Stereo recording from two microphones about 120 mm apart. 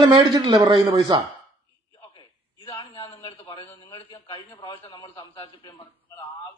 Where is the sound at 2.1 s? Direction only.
40° left (ahead or behind).